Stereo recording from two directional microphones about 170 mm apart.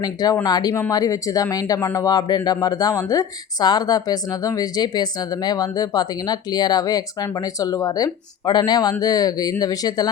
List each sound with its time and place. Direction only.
0.0 s speech: 25° left (ahead or behind)